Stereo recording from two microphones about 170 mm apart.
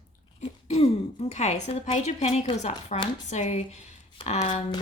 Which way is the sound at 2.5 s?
40° left (ahead or behind).